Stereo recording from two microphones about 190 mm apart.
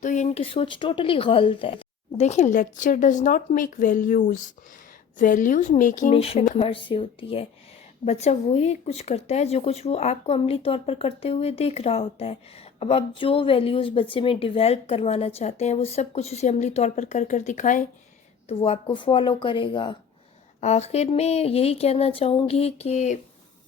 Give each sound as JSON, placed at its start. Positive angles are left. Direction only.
{"t": 0.0, "sound": "a woman's voice", "side_deg": 40}
{"t": 18.4, "sound": "a woman's voice", "side_deg": 30}